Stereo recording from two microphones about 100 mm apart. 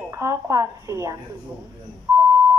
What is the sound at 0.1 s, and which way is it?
Speech, 30° right (ahead or behind).